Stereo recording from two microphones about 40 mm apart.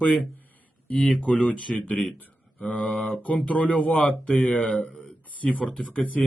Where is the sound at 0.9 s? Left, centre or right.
Left.